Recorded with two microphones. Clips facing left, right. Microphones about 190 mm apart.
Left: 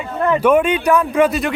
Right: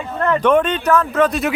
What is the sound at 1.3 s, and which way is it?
Speech, centre (ahead or behind).